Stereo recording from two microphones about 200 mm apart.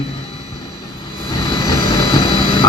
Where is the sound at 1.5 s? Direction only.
20° left (ahead or behind).